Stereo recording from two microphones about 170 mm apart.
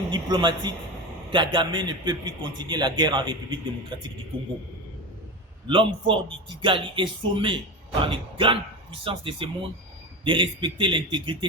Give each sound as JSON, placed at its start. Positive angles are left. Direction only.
{"t": 0.1, "sound": "a man's voice", "side_deg": -25}
{"t": 5.6, "sound": "a man's voice", "side_deg": -30}